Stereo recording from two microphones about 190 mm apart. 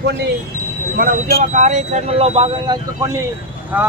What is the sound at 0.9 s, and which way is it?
Speech, 40° right (ahead or behind).